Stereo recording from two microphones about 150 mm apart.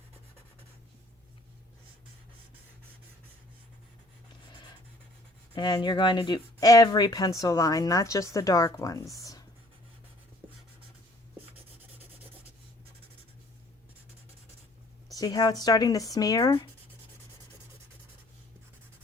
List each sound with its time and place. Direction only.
5.5 s speech: 30° left (ahead or behind)
15.1 s speech: 25° left (ahead or behind)